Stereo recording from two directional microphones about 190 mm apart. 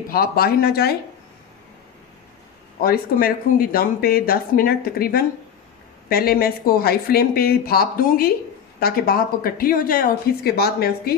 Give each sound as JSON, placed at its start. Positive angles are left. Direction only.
{"t": 0.1, "sound": "speech", "side_deg": 50}
{"t": 2.8, "sound": "speech", "side_deg": 50}